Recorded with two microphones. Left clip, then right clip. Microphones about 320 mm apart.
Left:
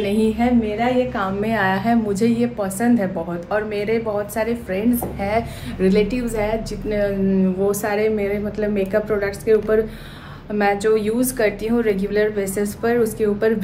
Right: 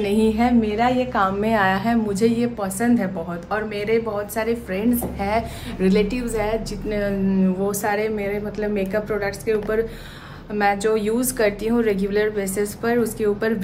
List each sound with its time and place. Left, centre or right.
0.0 s a woman's voice: centre